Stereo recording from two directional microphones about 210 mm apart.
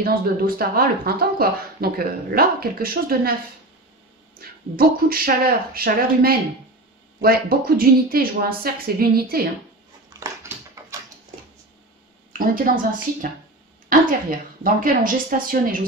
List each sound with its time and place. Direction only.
0.0 s speech: 45° right (ahead or behind)
4.4 s speech: 45° right (ahead or behind)
10.0 s dog: 15° right (ahead or behind)
12.3 s speech: 40° right (ahead or behind)
14.6 s speech: 40° right (ahead or behind)